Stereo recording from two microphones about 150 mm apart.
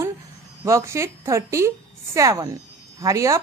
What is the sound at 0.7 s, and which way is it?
A woman's voice, 20° right (ahead or behind).